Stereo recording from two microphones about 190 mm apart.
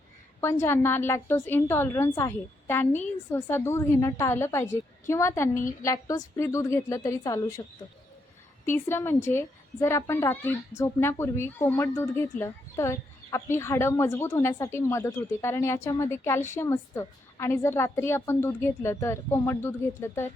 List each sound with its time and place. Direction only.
0.6 s a woman's voice: 10° left (ahead or behind)
8.6 s a woman's voice: 10° left (ahead or behind)